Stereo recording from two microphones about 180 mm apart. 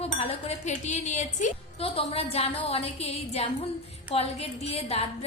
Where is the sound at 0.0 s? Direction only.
35° left (ahead or behind).